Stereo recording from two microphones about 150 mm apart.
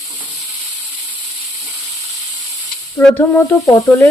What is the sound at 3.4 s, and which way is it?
Sizzle, 20° left (ahead or behind).